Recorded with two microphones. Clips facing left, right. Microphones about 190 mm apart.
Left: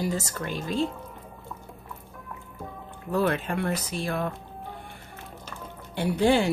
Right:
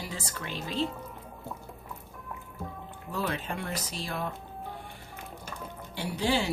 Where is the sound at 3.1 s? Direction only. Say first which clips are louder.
Left 8 dB; 60° left (ahead or behind).